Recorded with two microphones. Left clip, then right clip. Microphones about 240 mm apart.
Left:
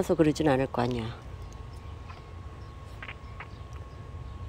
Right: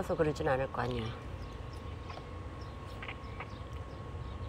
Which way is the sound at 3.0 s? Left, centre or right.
Centre.